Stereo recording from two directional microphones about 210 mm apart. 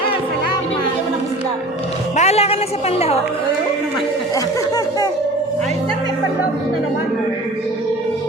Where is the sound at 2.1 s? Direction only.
30° left (ahead or behind).